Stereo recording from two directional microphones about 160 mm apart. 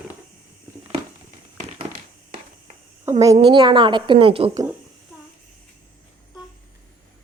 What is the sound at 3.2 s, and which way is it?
A woman's voice, 25° right (ahead or behind).